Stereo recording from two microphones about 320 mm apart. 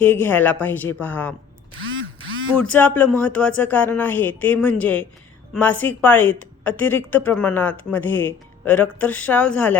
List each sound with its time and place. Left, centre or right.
0.0 s a woman's voice: centre
1.8 s a sound: right
2.6 s a woman's voice: centre